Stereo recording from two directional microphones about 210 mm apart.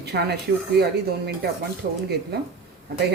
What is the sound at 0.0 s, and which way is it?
Speech, 50° right (ahead or behind).